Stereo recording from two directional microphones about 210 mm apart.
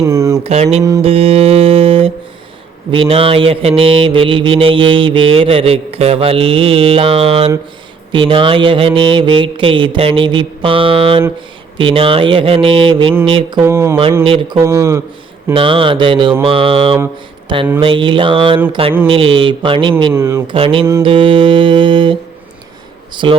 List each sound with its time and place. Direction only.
0.0 s mantra: 15° right (ahead or behind)
0.4 s mantra: 30° right (ahead or behind)
13.6 s speech: 10° right (ahead or behind)
14.3 s mantra: 25° right (ahead or behind)
14.6 s speech: 15° right (ahead or behind)
15.5 s mantra: 25° right (ahead or behind)
20.1 s speech: 15° right (ahead or behind)
20.5 s mantra: 25° right (ahead or behind)